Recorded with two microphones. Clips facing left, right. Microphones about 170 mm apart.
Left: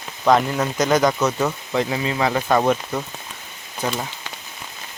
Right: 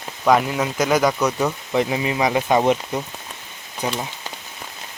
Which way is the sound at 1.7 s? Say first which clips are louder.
Right 1 dB; 20° right (ahead or behind).